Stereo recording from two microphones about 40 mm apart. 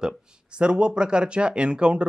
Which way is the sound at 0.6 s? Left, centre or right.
Right.